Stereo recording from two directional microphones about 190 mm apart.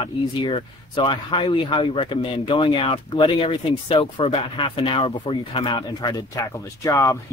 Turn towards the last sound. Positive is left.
turn(degrees=15)  # may be behind; listen again after turning